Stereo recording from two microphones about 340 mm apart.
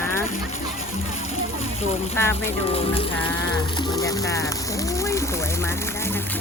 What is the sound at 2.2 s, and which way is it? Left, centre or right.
Speech, centre.